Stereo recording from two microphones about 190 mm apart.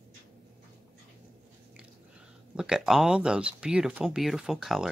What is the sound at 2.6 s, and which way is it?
Speech, 5° right (ahead or behind).